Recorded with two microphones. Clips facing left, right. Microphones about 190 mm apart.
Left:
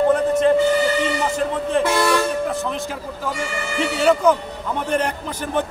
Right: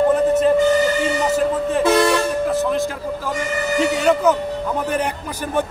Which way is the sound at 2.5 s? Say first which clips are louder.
Right 6 dB; centre (ahead or behind).